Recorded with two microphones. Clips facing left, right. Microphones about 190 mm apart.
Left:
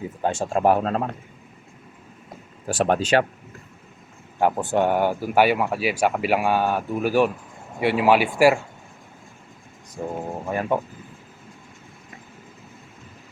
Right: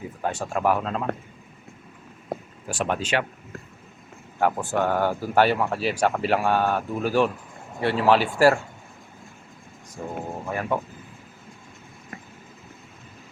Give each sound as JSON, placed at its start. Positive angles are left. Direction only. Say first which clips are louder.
{"t": 0.2, "sound": "speech", "louder": "left 4 dB", "side_deg": 25}
{"t": 2.6, "sound": "speech", "louder": "left 6 dB", "side_deg": 35}
{"t": 4.4, "sound": "speech", "louder": "left 3 dB", "side_deg": 20}
{"t": 10.0, "sound": "speech", "louder": "left 3 dB", "side_deg": 20}